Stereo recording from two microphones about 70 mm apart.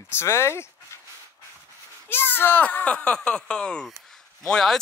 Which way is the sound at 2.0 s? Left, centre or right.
Left.